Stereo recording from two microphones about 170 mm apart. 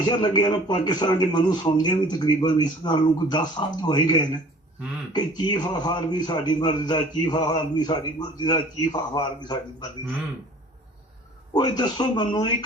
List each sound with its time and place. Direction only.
0.0 s a man's voice: 25° left (ahead or behind)
11.5 s a man's voice: 25° left (ahead or behind)